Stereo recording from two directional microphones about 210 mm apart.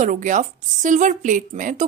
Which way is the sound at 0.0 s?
35° right (ahead or behind).